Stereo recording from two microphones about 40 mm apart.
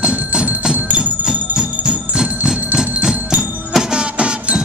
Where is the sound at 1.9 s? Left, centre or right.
Centre.